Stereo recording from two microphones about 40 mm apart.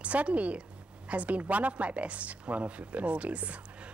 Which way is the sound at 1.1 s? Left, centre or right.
Right.